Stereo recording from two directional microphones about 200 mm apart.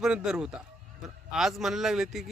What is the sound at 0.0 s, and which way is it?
A man's voice, 5° right (ahead or behind).